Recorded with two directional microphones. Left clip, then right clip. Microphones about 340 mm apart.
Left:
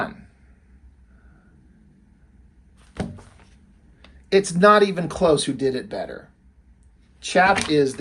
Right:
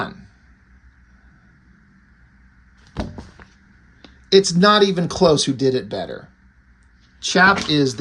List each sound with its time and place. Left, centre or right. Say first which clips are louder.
4.3 s speech: right 1 dB; centre
7.2 s speech: right 3 dB; centre